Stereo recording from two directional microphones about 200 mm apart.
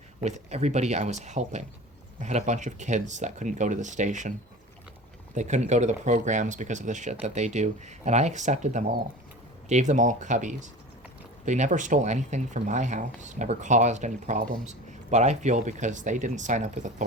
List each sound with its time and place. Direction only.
0.2 s speech: 35° right (ahead or behind)
5.3 s speech: 35° right (ahead or behind)